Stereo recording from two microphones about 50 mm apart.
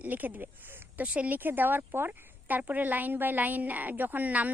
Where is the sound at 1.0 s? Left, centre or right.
Right.